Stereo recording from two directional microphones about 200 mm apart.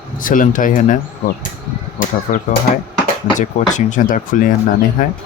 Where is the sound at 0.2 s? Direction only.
40° left (ahead or behind).